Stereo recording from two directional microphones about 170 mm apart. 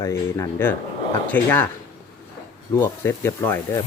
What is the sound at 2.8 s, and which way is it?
Speech, 15° left (ahead or behind).